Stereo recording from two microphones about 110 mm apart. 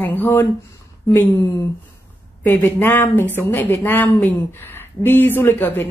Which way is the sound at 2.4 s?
15° left (ahead or behind).